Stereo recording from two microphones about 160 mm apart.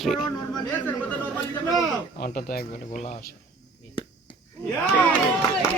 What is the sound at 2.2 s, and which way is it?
Speech, 70° left (ahead or behind).